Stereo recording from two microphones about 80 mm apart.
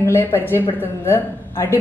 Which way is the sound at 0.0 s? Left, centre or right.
Left.